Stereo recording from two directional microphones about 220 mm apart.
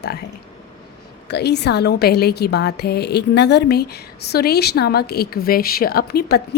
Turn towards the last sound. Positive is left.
turn(degrees=45)  # may be behind; listen again after turning